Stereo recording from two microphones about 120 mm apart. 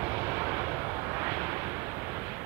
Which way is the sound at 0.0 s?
20° right (ahead or behind).